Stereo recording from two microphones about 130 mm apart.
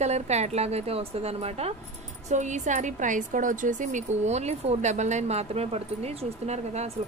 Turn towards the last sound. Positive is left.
turn(degrees=-55)  # may be behind; listen again after turning